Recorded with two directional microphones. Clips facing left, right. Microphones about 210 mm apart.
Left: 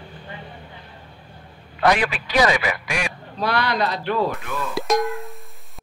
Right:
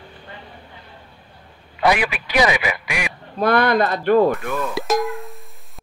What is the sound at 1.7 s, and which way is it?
Speech, 10° right (ahead or behind).